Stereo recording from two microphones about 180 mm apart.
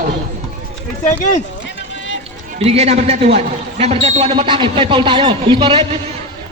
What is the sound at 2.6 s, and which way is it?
A man's voice, 35° right (ahead or behind).